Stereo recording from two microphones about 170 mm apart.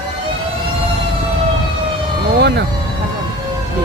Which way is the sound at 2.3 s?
80° right.